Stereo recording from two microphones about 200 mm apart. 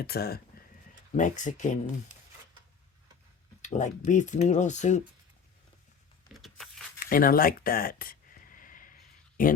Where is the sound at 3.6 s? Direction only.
35° left (ahead or behind).